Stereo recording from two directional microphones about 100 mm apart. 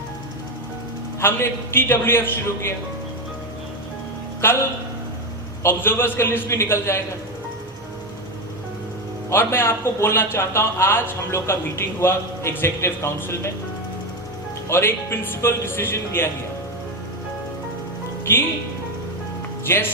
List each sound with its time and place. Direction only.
1.2 s a man's voice: 25° left (ahead or behind)
5.6 s a man's voice: 25° left (ahead or behind)
9.3 s a man's voice: 25° left (ahead or behind)
14.7 s a man's voice: 25° left (ahead or behind)
18.3 s a man's voice: 20° left (ahead or behind)
19.7 s a man's voice: 25° left (ahead or behind)